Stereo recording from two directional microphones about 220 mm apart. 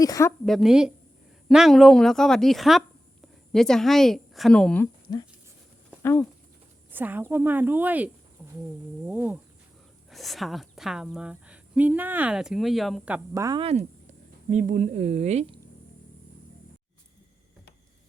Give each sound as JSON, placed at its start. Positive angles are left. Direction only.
{"t": 0.0, "sound": "a woman's voice", "side_deg": 15}
{"t": 0.4, "sound": "a woman's voice", "side_deg": 0}
{"t": 6.0, "sound": "speech", "side_deg": 10}
{"t": 6.9, "sound": "a woman's voice", "side_deg": -10}